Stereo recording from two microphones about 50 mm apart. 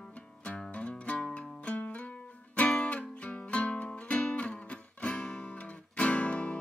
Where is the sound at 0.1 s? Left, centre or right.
Left.